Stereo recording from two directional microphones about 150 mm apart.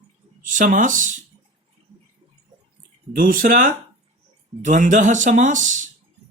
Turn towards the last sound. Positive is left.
turn(degrees=-55)  # may be behind; listen again after turning